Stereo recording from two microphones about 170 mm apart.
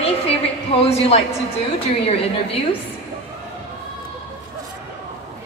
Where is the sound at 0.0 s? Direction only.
35° left (ahead or behind).